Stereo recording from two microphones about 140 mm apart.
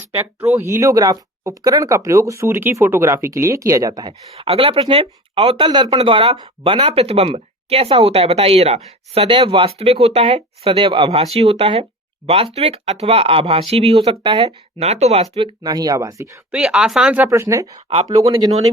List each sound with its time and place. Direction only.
0.5 s speech: 20° right (ahead or behind)
4.4 s speech: 40° right (ahead or behind)
6.8 s speech: 45° right (ahead or behind)
15.6 s speech: 30° right (ahead or behind)
16.5 s speech: 5° right (ahead or behind)
17.2 s speech: 20° right (ahead or behind)
17.8 s speech: 45° right (ahead or behind)
18.3 s speech: 30° right (ahead or behind)